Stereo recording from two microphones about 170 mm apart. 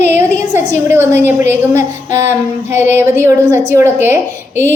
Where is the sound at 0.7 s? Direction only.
15° right (ahead or behind).